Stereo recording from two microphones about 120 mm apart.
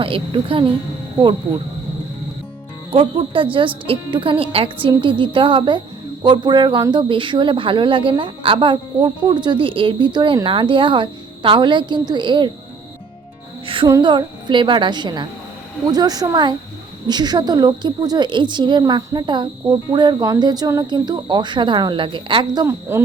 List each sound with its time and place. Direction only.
0.0 s a woman's voice: 45° right (ahead or behind)
2.9 s a woman's voice: 45° right (ahead or behind)
13.8 s a woman's voice: 35° right (ahead or behind)
22.6 s speech: 20° right (ahead or behind)